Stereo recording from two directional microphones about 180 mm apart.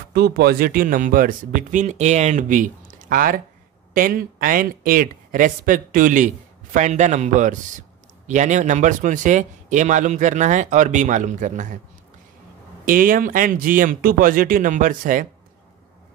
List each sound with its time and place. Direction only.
0.1 s speech: 60° right (ahead or behind); by 11.8 s 45° right (ahead or behind)
12.8 s speech: 50° right (ahead or behind)